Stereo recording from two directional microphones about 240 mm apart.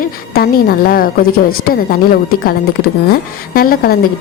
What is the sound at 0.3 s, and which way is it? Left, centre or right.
A woman's voice, left.